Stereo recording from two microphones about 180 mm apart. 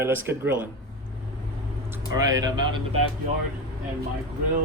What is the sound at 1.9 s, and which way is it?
Speech, 20° right (ahead or behind).